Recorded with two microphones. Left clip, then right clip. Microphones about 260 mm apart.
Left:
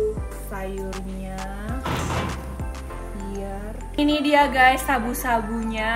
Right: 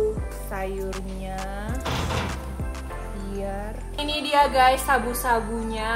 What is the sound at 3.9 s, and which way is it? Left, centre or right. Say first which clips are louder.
Music: left 3 dB; centre.